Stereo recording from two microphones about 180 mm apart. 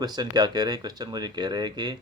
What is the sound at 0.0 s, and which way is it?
Speech, 20° right (ahead or behind).